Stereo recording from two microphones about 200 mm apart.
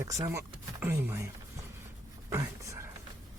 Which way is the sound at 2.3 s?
15° right (ahead or behind).